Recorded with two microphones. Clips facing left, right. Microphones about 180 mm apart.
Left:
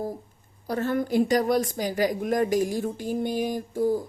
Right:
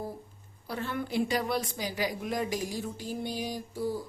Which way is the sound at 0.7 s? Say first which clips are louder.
Left 8 dB; 45° left (ahead or behind).